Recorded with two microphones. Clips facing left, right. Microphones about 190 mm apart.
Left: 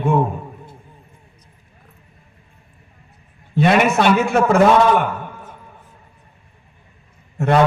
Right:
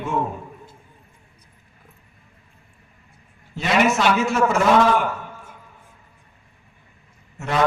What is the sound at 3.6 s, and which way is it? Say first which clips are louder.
Speech: left 4 dB; 60° left (ahead or behind).